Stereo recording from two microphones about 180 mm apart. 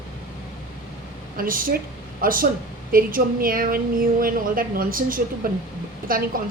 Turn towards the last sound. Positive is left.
turn(degrees=-50)  # may be behind; listen again after turning